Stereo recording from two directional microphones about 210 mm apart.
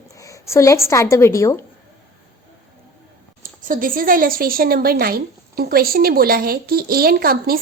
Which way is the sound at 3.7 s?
40° right (ahead or behind).